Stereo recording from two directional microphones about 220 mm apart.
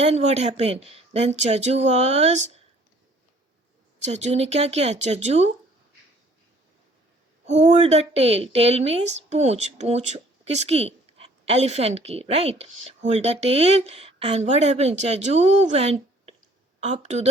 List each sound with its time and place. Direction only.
0.0 s a woman's voice: 30° right (ahead or behind)
4.0 s a woman's voice: 30° right (ahead or behind)
7.4 s a woman's voice: 30° right (ahead or behind)